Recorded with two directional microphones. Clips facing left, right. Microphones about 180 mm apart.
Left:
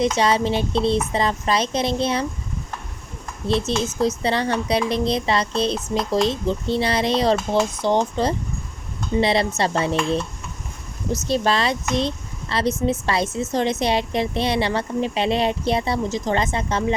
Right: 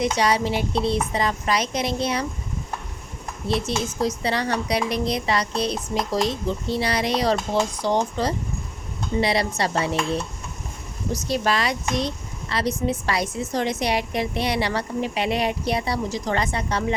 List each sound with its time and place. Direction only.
0.0 s speech: 25° left (ahead or behind)
3.7 s speech: 25° left (ahead or behind)
11.1 s speech: 25° left (ahead or behind)